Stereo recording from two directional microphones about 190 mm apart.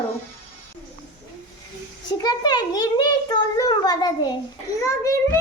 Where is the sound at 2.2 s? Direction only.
20° left (ahead or behind).